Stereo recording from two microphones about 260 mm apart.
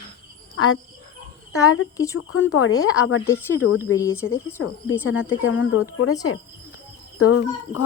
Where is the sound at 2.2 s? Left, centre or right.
Left.